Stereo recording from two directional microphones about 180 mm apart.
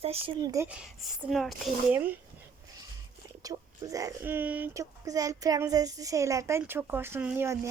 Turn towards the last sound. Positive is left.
turn(degrees=-15)  # may be behind; listen again after turning